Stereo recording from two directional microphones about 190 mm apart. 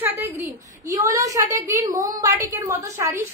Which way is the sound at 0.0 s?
10° right (ahead or behind).